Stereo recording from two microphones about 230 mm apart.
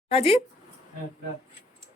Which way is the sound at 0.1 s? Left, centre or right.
Left.